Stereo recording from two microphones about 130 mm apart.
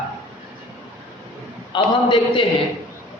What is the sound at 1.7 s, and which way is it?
Speech, 40° left (ahead or behind).